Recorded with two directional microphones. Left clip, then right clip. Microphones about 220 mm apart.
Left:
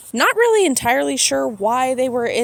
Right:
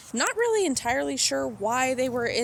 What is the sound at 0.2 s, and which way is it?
Speech, 40° left (ahead or behind).